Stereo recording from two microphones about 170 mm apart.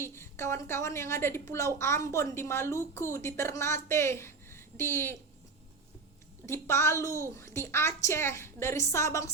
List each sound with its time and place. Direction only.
0.0 s a woman's voice: 15° left (ahead or behind)
6.4 s a woman's voice: 15° left (ahead or behind)